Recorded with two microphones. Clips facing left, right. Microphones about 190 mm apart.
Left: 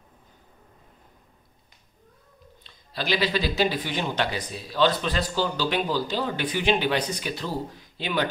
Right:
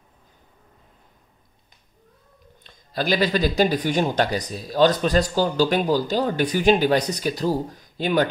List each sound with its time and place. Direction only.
2.6 s speech: 45° right (ahead or behind)